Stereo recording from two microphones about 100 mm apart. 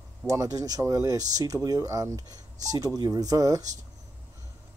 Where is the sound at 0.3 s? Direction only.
35° right (ahead or behind).